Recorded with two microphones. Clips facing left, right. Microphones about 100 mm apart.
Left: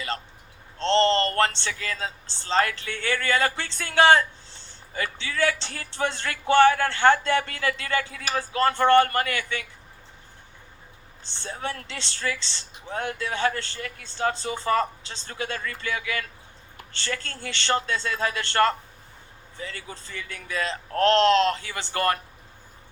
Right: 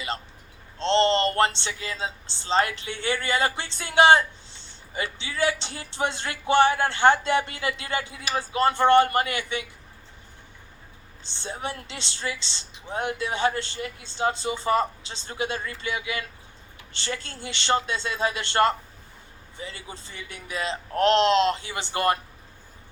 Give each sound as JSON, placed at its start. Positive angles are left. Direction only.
{"t": 0.8, "sound": "speech", "side_deg": -20}
{"t": 11.3, "sound": "speech", "side_deg": -20}